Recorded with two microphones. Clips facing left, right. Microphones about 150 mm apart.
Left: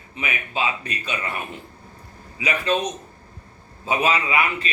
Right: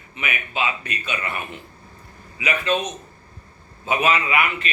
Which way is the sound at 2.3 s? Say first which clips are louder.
Even; 30° left (ahead or behind).